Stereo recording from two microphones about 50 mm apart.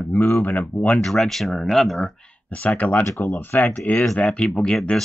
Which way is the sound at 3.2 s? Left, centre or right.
Left.